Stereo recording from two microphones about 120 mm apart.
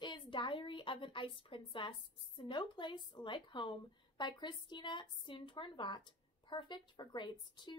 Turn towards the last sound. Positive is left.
turn(degrees=40)  # may be behind; listen again after turning